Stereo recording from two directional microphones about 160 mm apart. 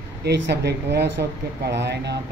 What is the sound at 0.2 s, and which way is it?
Speech, 90° right.